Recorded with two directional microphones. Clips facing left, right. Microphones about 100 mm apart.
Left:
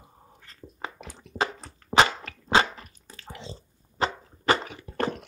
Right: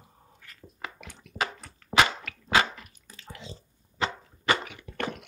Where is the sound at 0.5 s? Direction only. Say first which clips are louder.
Left 3 dB; 30° left (ahead or behind).